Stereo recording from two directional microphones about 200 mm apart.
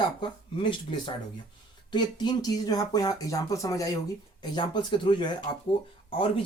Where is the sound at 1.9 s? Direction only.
20° left (ahead or behind).